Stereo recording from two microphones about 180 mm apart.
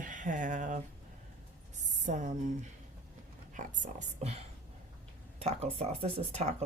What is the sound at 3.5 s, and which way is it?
Speech, 45° right (ahead or behind).